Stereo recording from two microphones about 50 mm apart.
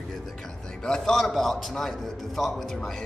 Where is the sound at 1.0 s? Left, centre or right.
Centre.